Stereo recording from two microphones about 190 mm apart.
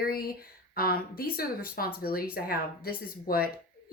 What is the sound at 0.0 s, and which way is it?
A woman's voice, 50° left (ahead or behind).